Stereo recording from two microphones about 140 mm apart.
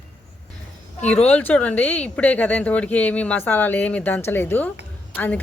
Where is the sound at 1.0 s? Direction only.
10° left (ahead or behind).